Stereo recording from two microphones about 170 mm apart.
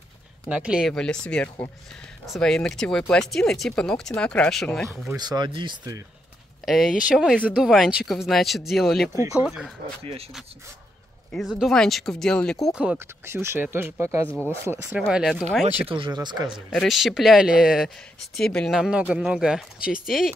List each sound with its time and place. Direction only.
0.5 s speech: 5° right (ahead or behind)
5.1 s speech: 25° right (ahead or behind)
6.6 s speech: centre (ahead or behind)
11.6 s speech: centre (ahead or behind); by 15.0 s 15° right (ahead or behind)
15.0 s speech: centre (ahead or behind)
15.9 s speech: 25° right (ahead or behind)
16.5 s speech: centre (ahead or behind)